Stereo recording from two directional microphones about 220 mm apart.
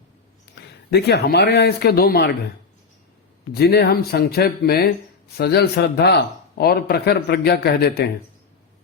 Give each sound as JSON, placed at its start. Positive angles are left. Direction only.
{"t": 0.5, "sound": "speech", "side_deg": 50}
{"t": 3.5, "sound": "speech", "side_deg": 45}